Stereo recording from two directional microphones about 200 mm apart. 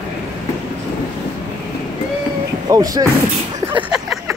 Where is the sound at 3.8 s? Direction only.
5° right (ahead or behind).